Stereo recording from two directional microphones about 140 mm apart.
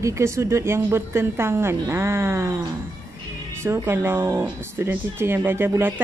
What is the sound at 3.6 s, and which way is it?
Speech, 20° right (ahead or behind).